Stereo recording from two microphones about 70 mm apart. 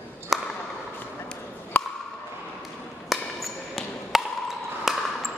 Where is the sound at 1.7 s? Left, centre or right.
Left.